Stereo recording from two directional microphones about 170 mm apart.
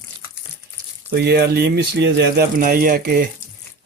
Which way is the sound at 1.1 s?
65° right (ahead or behind).